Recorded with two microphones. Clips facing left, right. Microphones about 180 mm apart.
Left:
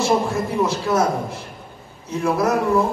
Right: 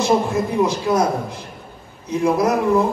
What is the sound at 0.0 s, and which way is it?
A man's voice, 15° right (ahead or behind).